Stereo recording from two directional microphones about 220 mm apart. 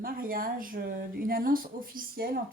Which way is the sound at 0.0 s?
40° right (ahead or behind).